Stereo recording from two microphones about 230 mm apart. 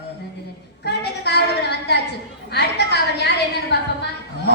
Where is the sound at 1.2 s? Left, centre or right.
Left.